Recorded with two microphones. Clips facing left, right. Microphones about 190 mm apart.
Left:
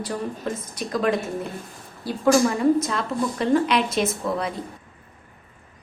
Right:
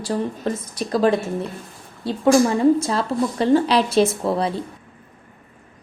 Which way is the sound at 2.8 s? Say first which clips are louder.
Right 4 dB; 30° right (ahead or behind).